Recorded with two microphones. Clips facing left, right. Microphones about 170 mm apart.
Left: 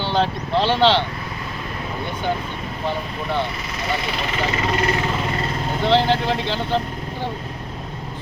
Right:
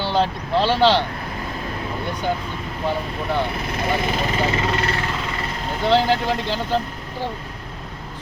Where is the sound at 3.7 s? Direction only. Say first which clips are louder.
Right 3 dB; 50° right (ahead or behind).